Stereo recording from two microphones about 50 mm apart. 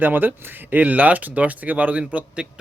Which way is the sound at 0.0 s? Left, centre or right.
Right.